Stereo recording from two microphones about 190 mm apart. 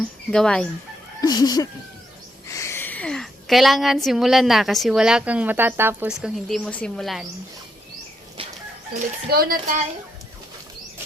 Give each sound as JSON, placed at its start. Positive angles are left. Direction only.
{"t": 0.0, "sound": "speech", "side_deg": 5}
{"t": 1.2, "sound": "a woman's voice", "side_deg": 20}
{"t": 9.0, "sound": "speech", "side_deg": -50}